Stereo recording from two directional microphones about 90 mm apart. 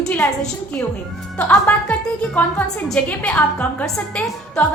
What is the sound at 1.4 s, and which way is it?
A woman's voice, 15° left (ahead or behind).